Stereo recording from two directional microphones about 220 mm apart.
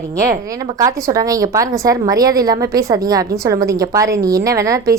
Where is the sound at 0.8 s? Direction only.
15° right (ahead or behind).